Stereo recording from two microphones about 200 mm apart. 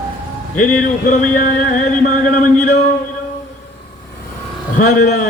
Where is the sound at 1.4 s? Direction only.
40° left (ahead or behind).